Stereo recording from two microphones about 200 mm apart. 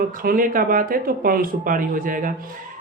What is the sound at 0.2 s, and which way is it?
Speech, 45° right (ahead or behind).